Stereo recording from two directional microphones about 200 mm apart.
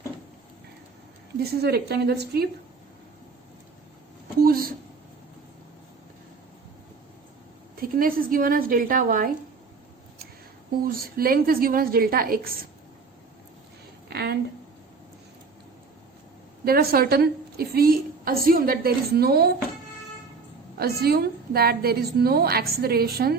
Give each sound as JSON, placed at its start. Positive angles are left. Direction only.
{"t": 1.4, "sound": "a woman's voice", "side_deg": -50}
{"t": 4.4, "sound": "a sound", "side_deg": -45}
{"t": 7.8, "sound": "a woman's voice", "side_deg": -45}
{"t": 10.8, "sound": "a woman's voice", "side_deg": -45}
{"t": 14.1, "sound": "a sound", "side_deg": -55}
{"t": 16.6, "sound": "a woman's voice", "side_deg": -50}
{"t": 20.7, "sound": "a woman's voice", "side_deg": -50}